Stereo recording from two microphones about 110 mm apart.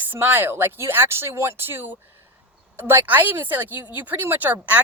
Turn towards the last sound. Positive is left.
turn(degrees=-15)  # may be behind; listen again after turning